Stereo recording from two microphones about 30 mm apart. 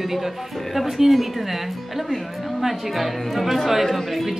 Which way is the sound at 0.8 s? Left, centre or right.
Centre.